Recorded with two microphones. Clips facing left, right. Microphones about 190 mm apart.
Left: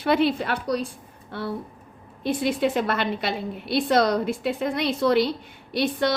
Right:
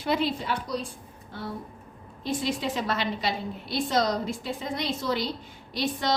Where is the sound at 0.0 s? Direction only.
65° left (ahead or behind).